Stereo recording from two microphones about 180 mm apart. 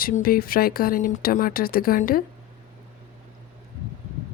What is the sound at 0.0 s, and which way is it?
Speech, 55° left (ahead or behind).